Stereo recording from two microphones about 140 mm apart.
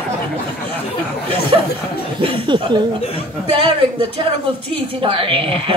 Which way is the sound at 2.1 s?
35° right (ahead or behind).